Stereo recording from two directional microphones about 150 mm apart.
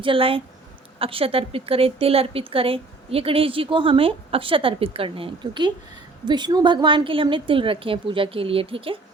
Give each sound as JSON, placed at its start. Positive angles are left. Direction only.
{"t": 0.0, "sound": "a woman's voice", "side_deg": -35}